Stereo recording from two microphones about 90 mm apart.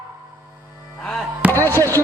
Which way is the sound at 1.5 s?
25° left (ahead or behind).